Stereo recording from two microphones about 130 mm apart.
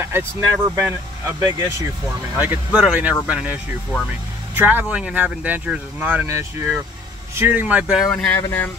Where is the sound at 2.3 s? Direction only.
10° right (ahead or behind).